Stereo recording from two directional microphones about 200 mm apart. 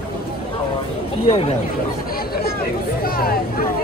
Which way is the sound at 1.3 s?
30° left (ahead or behind).